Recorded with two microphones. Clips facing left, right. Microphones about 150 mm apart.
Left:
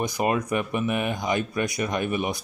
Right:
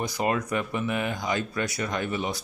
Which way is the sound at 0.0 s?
15° left (ahead or behind).